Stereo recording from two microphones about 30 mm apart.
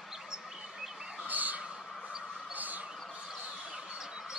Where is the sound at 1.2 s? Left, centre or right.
Right.